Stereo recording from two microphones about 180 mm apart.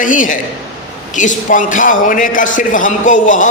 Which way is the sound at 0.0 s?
45° left (ahead or behind).